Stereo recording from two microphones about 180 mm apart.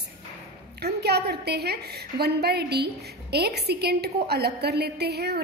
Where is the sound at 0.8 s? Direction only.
65° right (ahead or behind).